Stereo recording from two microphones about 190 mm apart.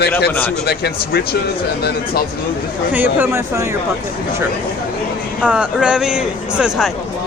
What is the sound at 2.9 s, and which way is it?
Speech, 10° right (ahead or behind).